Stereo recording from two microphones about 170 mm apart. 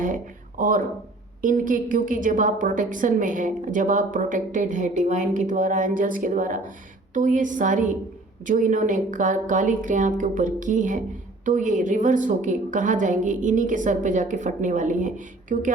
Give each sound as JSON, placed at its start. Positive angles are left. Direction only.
{"t": 0.6, "sound": "a woman's voice", "side_deg": -55}